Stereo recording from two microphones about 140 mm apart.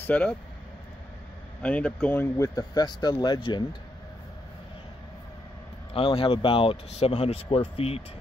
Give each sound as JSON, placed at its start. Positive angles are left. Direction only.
{"t": 0.0, "sound": "speech", "side_deg": 10}
{"t": 1.6, "sound": "speech", "side_deg": 10}
{"t": 2.4, "sound": "speech", "side_deg": 25}
{"t": 5.9, "sound": "speech", "side_deg": 40}